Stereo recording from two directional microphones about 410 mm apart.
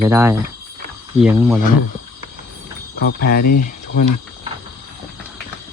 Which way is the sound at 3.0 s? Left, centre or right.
Left.